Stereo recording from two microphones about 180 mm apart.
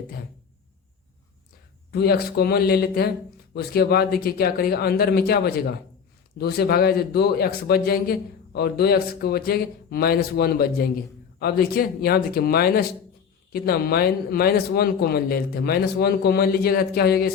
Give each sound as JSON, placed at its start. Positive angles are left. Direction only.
{"t": 1.9, "sound": "speech", "side_deg": 60}